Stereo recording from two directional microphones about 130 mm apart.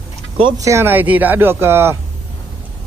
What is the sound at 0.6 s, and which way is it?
Speech, 20° right (ahead or behind).